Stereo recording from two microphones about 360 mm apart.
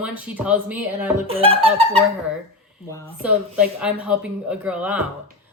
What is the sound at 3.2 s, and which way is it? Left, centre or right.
A woman's voice, centre.